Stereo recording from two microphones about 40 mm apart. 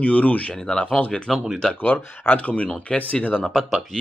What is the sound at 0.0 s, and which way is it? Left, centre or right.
Speech, left.